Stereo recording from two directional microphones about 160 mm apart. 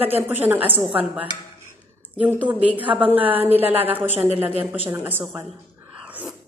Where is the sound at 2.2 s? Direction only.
10° right (ahead or behind).